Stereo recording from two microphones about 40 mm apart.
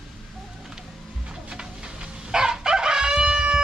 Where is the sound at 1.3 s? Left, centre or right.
Centre.